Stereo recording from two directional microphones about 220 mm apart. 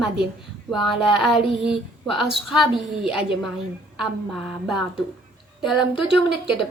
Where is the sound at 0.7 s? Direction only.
Centre (ahead or behind).